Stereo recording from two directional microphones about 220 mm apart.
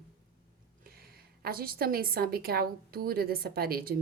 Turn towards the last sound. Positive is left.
turn(degrees=-45)  # may be behind; listen again after turning